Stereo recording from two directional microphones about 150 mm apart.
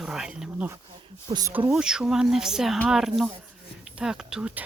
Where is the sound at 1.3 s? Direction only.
40° right (ahead or behind).